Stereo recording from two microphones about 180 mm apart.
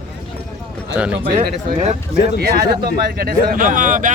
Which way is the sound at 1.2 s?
50° right (ahead or behind).